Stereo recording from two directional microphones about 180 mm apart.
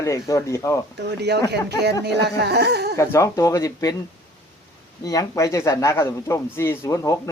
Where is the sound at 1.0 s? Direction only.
70° right (ahead or behind).